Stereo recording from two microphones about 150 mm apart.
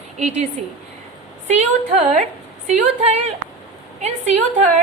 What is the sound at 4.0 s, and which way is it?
Speech, 50° right (ahead or behind).